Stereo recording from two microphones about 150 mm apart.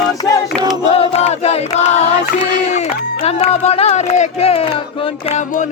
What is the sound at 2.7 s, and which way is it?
Speech, 45° left (ahead or behind).